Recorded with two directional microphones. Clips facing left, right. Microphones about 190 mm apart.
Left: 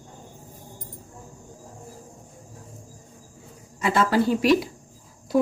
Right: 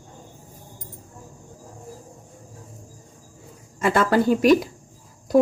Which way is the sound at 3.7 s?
50° right (ahead or behind).